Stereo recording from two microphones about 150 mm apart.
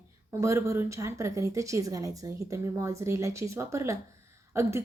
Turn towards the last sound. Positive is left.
turn(degrees=-15)  # may be behind; listen again after turning